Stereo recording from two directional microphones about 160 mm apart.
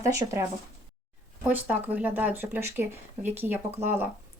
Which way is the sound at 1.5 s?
10° right (ahead or behind).